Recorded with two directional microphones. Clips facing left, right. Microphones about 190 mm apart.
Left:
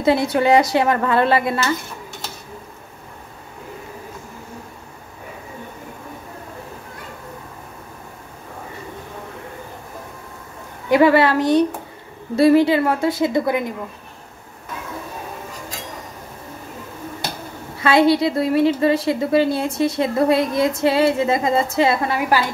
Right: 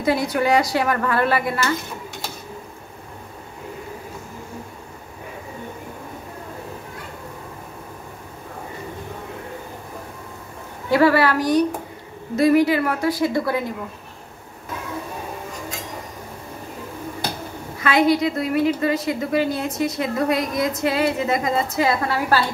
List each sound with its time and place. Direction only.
0.0 s a woman's voice: 25° left (ahead or behind)
10.9 s a woman's voice: 20° left (ahead or behind)
17.8 s a woman's voice: 30° left (ahead or behind)